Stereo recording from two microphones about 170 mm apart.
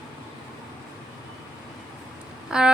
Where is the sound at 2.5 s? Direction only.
5° right (ahead or behind).